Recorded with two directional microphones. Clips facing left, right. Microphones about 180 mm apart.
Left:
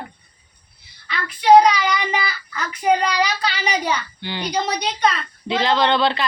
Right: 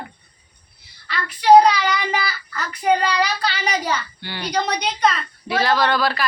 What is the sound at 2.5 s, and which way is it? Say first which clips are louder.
Child singing: even; centre (ahead or behind).